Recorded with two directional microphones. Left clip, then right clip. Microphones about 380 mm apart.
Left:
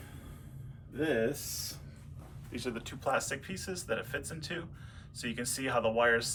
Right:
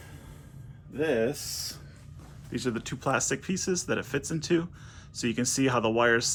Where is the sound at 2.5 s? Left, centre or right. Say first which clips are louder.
Right 7 dB; right.